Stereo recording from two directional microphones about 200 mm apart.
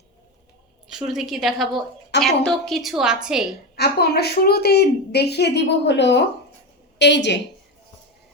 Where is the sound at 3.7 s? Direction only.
55° left (ahead or behind).